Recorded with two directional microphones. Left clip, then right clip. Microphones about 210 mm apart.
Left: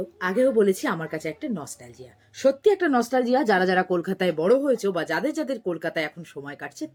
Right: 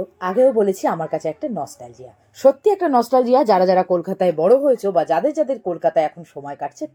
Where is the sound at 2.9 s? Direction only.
15° left (ahead or behind).